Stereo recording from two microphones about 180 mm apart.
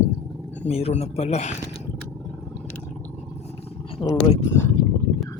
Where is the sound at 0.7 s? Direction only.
35° left (ahead or behind).